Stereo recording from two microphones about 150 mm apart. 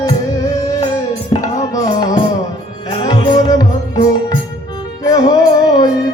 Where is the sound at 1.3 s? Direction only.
30° left (ahead or behind).